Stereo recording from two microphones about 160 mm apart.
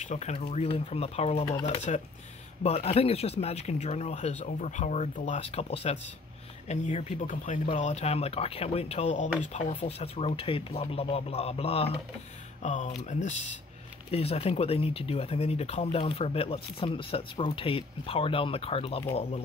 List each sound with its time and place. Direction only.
0.0 s speech: 45° left (ahead or behind)
12.6 s speech: 50° left (ahead or behind)